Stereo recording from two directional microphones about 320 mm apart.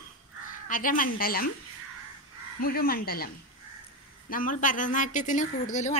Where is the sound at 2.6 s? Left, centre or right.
Left.